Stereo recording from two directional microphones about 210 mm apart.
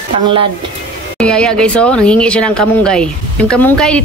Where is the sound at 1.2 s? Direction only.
5° left (ahead or behind).